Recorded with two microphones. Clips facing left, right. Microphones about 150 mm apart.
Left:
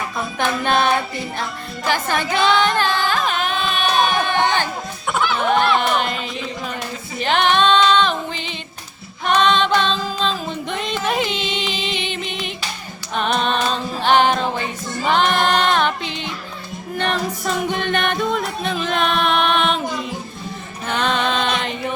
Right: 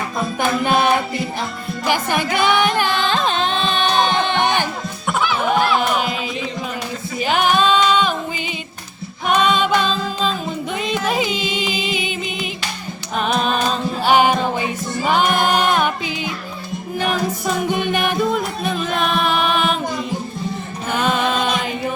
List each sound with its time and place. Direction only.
0.3 s music: 10° right (ahead or behind)
5.0 s music: 5° right (ahead or behind)
7.2 s female singing: 5° right (ahead or behind)
9.2 s music: 10° right (ahead or behind)